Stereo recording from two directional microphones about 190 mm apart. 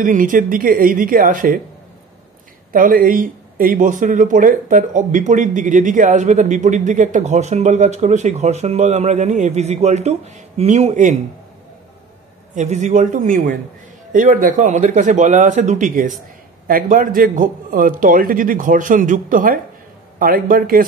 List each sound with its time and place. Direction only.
0.0 s a man's voice: 45° right (ahead or behind)
2.7 s speech: 45° right (ahead or behind)
12.5 s a man's voice: 40° right (ahead or behind)